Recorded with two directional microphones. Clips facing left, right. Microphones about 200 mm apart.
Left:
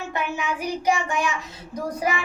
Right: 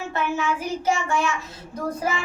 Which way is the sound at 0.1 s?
15° left (ahead or behind).